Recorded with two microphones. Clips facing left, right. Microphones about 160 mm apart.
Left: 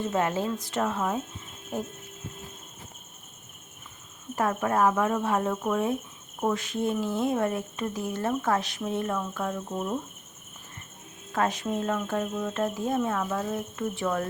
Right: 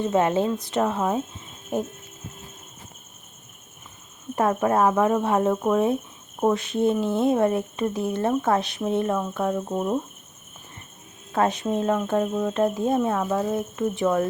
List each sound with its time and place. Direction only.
0.0 s speech: 20° right (ahead or behind)
4.4 s speech: 25° right (ahead or behind)
11.3 s speech: 25° right (ahead or behind)
12.5 s speech: 20° right (ahead or behind)